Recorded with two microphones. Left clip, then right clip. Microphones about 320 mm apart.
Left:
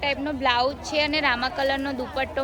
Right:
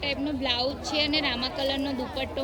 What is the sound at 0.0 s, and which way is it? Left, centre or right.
A woman's voice, centre.